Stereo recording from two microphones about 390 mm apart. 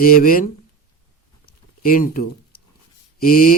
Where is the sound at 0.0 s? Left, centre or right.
Left.